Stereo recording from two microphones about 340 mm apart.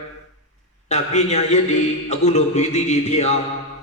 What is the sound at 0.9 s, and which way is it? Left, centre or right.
A man's voice, centre.